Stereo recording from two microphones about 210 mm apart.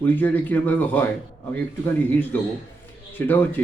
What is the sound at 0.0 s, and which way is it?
Speech, 10° left (ahead or behind).